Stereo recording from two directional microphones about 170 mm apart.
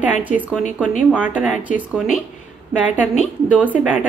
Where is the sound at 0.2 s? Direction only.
10° right (ahead or behind).